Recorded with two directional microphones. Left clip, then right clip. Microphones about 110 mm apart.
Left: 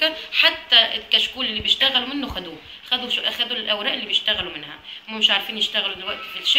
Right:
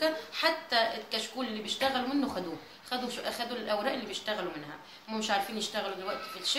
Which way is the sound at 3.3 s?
25° right (ahead or behind).